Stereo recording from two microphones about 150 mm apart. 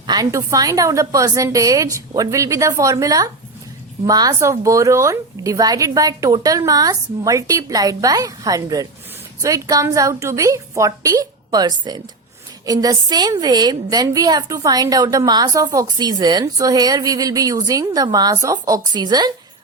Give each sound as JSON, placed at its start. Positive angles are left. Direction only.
{"t": 0.1, "sound": "a woman's voice", "side_deg": -20}